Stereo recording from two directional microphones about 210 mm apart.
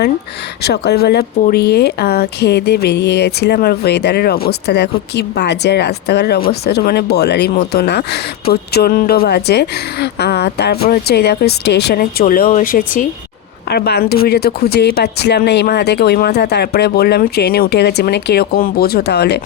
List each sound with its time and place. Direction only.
0.6 s speech: 50° left (ahead or behind)